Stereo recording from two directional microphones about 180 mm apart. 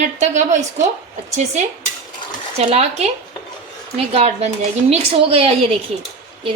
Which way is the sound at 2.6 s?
35° right (ahead or behind).